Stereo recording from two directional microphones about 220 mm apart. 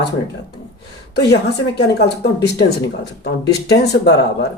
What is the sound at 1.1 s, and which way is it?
Speech, 50° left (ahead or behind).